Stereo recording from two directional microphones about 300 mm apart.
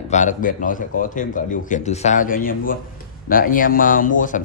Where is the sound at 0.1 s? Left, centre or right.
Left.